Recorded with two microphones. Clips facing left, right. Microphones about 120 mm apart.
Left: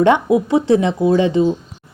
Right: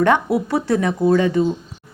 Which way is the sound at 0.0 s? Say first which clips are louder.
Left 3 dB; 20° left (ahead or behind).